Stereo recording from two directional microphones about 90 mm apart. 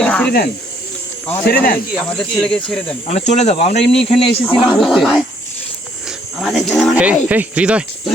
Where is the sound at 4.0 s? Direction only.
90° left.